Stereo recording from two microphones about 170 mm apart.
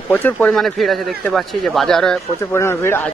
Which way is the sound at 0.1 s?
10° left (ahead or behind).